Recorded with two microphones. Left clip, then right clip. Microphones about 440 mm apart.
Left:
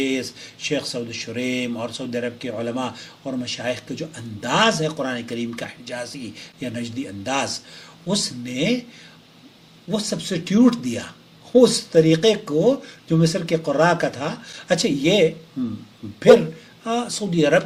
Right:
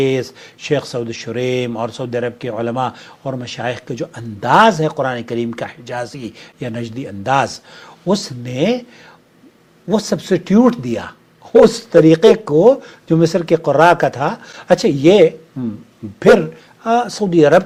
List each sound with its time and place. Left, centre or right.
0.0 s speech: right
9.9 s speech: right
16.8 s speech: right